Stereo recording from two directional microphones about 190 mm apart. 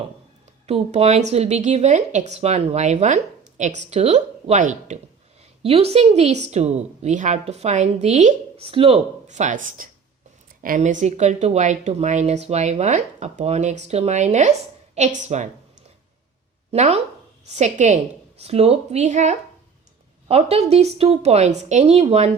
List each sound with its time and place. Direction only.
0.7 s speech: 35° right (ahead or behind)
16.7 s speech: 35° right (ahead or behind)